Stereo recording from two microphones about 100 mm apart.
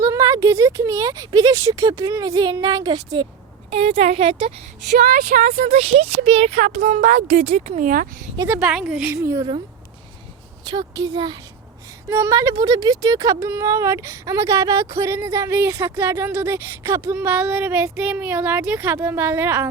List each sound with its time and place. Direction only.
0.0 s speech: 30° right (ahead or behind); by 3.2 s 45° right (ahead or behind)
3.7 s speech: 90° right; by 4.6 s 75° right (ahead or behind)
5.6 s speech: 85° right
8.4 s a woman's voice: 10° right (ahead or behind)
9.0 s speech: 30° right (ahead or behind)
10.7 s speech: 45° right (ahead or behind)
12.0 s speech: 25° right (ahead or behind)
12.3 s speech: 35° right (ahead or behind)